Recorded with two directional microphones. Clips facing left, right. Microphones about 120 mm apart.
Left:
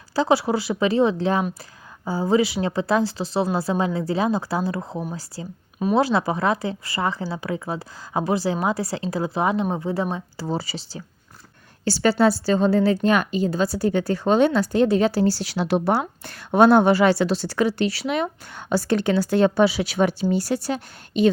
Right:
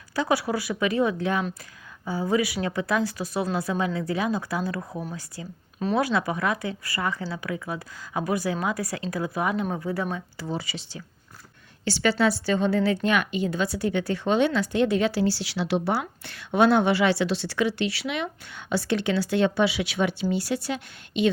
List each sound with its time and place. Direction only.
0.2 s a woman's voice: 25° left (ahead or behind)